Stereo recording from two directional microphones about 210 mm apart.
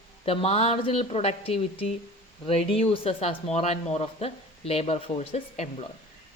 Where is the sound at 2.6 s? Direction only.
25° left (ahead or behind).